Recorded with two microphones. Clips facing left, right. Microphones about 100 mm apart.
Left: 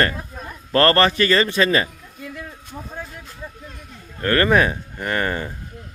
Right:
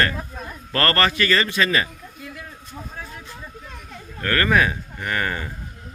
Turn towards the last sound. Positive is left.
turn(degrees=30)  # may be behind; listen again after turning